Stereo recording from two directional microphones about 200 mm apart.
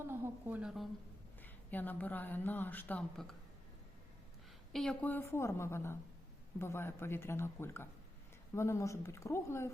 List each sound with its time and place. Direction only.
0.1 s a woman's voice: 10° right (ahead or behind)
1.4 s speech: 10° left (ahead or behind)
4.7 s speech: 5° left (ahead or behind)